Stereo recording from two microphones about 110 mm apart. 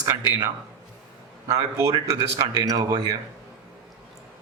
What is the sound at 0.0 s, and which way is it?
Speech, 35° right (ahead or behind).